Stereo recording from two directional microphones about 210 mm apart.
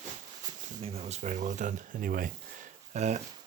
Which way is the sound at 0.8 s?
30° right (ahead or behind).